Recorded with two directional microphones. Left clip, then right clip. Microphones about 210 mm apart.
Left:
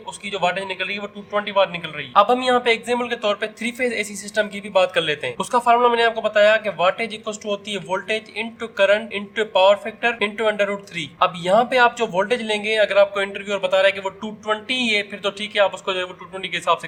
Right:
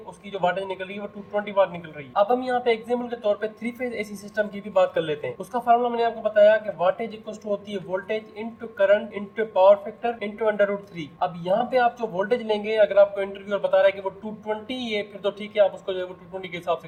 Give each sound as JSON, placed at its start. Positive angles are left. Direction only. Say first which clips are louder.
{"t": 0.3, "sound": "speech", "louder": "left 3 dB", "side_deg": 45}